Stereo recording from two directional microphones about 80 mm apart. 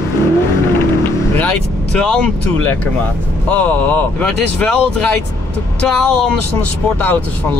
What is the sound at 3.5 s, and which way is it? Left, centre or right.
Speech, centre.